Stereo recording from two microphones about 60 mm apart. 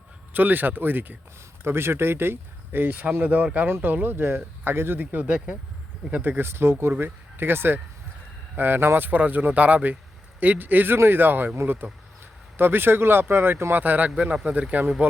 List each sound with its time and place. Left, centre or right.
0.3 s speech: right
13.7 s speech: right